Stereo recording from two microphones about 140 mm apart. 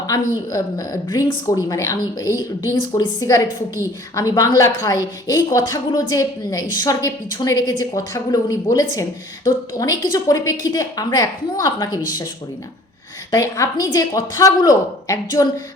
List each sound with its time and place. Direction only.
0.1 s speech: 25° left (ahead or behind)
13.3 s speech: 25° left (ahead or behind)